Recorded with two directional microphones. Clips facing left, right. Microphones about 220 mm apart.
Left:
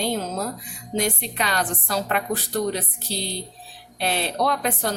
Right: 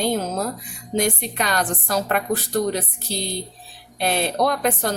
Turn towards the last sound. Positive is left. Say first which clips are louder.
# right 3 dB
turn(degrees=-45)  # may be behind; listen again after turning